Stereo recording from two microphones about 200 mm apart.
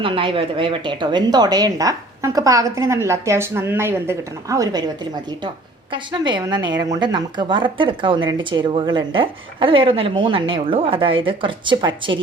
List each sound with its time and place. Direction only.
0.0 s a woman's voice: 25° right (ahead or behind)
5.9 s a woman's voice: 25° right (ahead or behind)